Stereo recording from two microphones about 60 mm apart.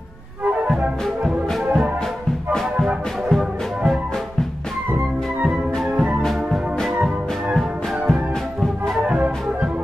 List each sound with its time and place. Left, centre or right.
1.2 s music: centre
3.3 s music: centre
5.4 s music: centre
6.2 s music: centre